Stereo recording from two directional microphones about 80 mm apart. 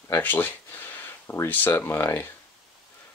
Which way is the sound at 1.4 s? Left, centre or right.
Left.